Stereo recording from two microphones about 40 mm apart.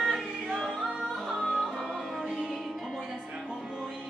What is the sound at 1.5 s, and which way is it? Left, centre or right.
Music, centre.